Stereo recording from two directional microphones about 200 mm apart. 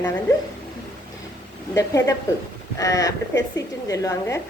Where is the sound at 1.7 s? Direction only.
15° left (ahead or behind).